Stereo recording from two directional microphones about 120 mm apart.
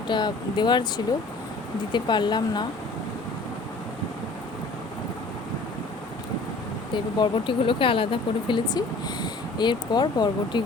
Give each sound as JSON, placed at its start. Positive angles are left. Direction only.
{"t": 0.1, "sound": "speech", "side_deg": 35}
{"t": 6.9, "sound": "speech", "side_deg": 40}